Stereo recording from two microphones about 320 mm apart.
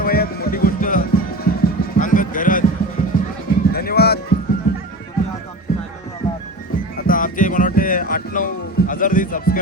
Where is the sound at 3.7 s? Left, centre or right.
Left.